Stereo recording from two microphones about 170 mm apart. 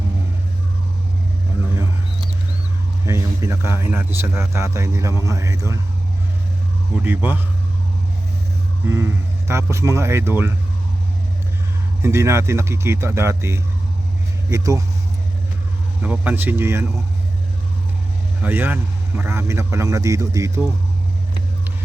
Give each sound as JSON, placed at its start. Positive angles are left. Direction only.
{"t": 3.1, "sound": "a man's voice", "side_deg": -15}
{"t": 7.0, "sound": "a man's voice", "side_deg": -10}
{"t": 8.9, "sound": "a man's voice", "side_deg": -15}
{"t": 12.0, "sound": "a man's voice", "side_deg": -15}
{"t": 16.0, "sound": "a man's voice", "side_deg": -10}
{"t": 18.4, "sound": "a man's voice", "side_deg": -10}